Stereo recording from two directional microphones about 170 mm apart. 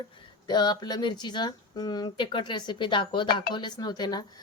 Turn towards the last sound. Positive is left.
turn(degrees=25)  # may be behind; listen again after turning